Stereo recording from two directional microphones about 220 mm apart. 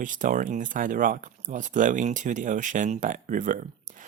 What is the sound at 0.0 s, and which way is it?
Speech, 35° right (ahead or behind).